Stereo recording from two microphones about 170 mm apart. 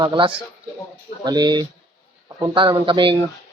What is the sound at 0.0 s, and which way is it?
Speech, 30° right (ahead or behind).